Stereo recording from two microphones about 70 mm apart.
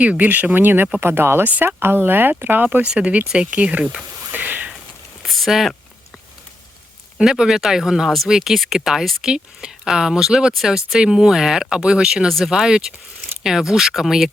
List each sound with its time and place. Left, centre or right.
0.0 s speech: centre
2.8 s speech: centre
4.3 s a sound: right
5.2 s speech: centre
7.2 s speech: centre